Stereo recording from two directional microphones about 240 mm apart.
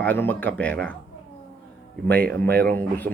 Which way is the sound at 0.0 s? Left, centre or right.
Centre.